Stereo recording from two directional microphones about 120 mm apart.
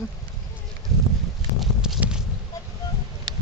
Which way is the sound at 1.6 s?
Centre (ahead or behind).